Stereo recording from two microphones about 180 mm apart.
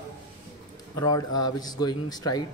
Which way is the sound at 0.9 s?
20° left (ahead or behind).